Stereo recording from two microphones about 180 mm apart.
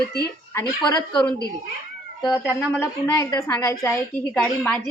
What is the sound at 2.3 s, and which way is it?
Speech, 10° left (ahead or behind).